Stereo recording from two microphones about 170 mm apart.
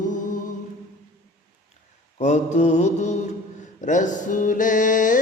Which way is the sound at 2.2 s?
40° left (ahead or behind).